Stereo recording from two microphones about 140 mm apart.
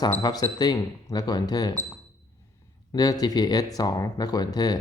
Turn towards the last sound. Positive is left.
turn(degrees=30)  # may be behind; listen again after turning